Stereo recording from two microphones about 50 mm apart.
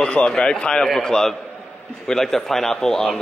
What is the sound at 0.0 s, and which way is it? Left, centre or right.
A man's voice, left.